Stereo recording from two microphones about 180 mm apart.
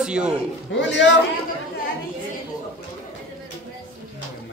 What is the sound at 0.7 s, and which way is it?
Speech, 85° left.